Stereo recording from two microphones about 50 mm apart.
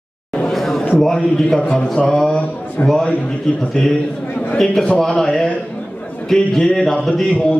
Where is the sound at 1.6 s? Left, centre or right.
Left.